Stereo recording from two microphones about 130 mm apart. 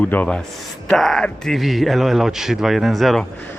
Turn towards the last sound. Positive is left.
turn(degrees=0)  # may be behind; listen again after turning